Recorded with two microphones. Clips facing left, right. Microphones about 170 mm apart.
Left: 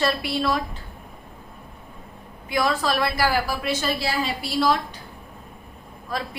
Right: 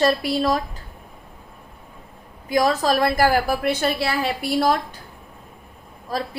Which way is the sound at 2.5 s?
40° right (ahead or behind).